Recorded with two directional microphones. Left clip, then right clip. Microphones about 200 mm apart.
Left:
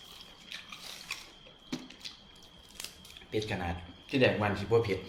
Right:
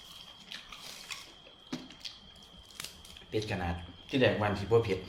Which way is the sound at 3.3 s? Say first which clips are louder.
Even; centre (ahead or behind).